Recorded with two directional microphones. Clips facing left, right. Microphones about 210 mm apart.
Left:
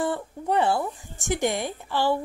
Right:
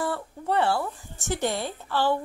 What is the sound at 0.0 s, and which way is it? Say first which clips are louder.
Speech: left 2 dB; 20° left (ahead or behind).